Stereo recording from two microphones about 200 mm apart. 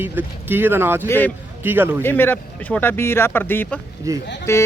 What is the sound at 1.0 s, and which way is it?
Speech, 10° left (ahead or behind).